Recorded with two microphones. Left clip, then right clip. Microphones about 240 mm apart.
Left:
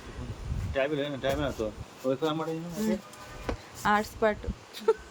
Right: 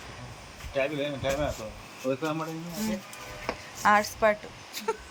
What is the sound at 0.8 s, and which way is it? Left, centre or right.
Speech, left.